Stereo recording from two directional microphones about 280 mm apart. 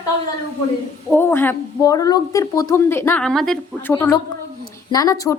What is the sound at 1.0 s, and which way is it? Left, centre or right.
Speech, centre.